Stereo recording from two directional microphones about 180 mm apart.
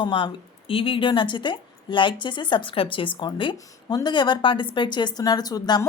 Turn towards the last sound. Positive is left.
turn(degrees=20)  # may be behind; listen again after turning